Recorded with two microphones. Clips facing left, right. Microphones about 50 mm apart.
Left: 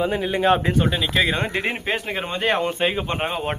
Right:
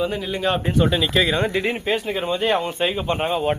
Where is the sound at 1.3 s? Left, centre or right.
Left.